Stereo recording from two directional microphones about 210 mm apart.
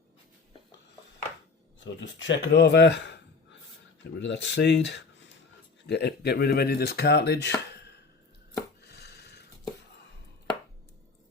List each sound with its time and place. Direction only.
1.8 s speech: 60° left (ahead or behind)
4.2 s speech: 55° left (ahead or behind)
8.8 s a sound: 50° left (ahead or behind)